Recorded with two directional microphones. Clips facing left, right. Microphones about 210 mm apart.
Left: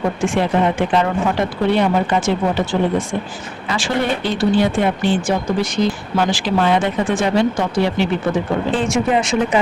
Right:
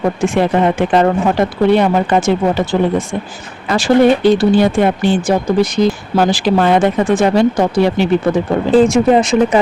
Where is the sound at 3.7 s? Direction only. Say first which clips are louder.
Right 10 dB; 40° right (ahead or behind).